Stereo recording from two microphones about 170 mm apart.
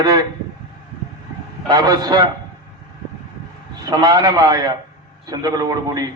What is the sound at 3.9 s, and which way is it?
A man's voice, 20° right (ahead or behind).